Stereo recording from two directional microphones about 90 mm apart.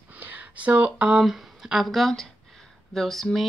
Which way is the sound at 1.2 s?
5° right (ahead or behind).